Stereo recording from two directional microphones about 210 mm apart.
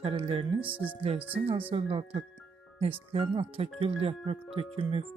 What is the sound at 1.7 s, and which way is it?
Speech, 25° right (ahead or behind).